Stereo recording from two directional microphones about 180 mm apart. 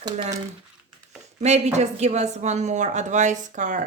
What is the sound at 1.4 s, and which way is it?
Speech, 40° right (ahead or behind).